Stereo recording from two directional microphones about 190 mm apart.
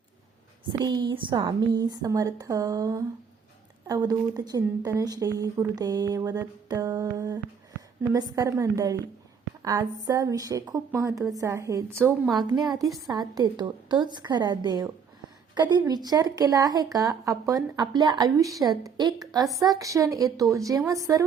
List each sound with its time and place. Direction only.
0.7 s a woman's voice: 20° right (ahead or behind)